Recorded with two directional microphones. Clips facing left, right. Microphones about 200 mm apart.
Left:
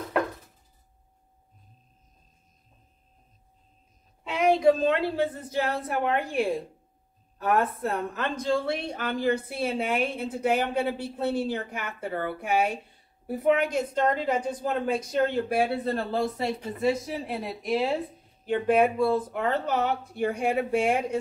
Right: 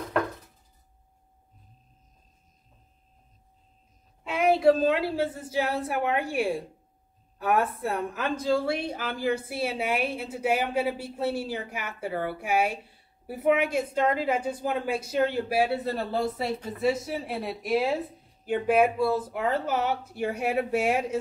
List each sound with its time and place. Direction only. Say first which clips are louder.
4.2 s a woman's voice: even; 5° right (ahead or behind)